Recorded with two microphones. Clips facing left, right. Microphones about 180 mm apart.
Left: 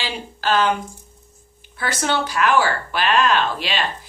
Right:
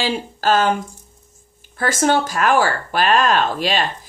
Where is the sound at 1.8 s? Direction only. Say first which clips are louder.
Right 5 dB; 45° right (ahead or behind).